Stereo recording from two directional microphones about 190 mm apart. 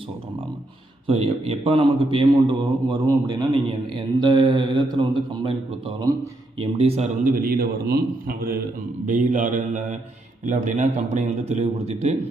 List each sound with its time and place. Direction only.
1.0 s a man's voice: 30° right (ahead or behind)
6.6 s a man's voice: 30° right (ahead or behind)